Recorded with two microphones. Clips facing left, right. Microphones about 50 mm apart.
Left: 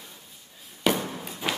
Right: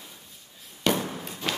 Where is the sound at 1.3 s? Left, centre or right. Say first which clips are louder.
Left 2 dB; centre.